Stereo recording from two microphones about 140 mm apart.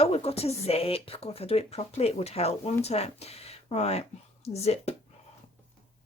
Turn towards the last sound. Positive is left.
turn(degrees=50)  # may be behind; listen again after turning